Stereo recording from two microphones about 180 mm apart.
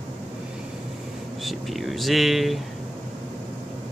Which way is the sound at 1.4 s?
Centre (ahead or behind).